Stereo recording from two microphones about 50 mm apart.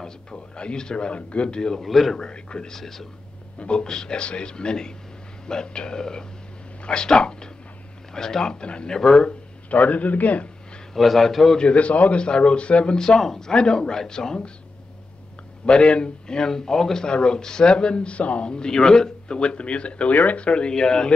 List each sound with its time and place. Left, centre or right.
0.0 s speech: centre
1.9 s a man's voice: centre
2.1 s speech: centre
3.5 s speech: left
9.7 s a man's voice: left
11.0 s a man's voice: centre
11.6 s a man's voice: left
15.6 s a man's voice: centre